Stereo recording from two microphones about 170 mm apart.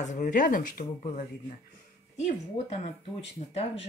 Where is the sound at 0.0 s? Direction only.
45° left (ahead or behind).